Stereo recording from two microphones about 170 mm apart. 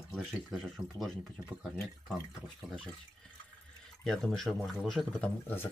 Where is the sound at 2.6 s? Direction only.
Centre (ahead or behind).